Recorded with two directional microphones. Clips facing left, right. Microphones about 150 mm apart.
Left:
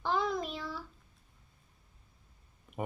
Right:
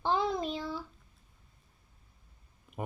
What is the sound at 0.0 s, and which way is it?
Child singing, 25° right (ahead or behind).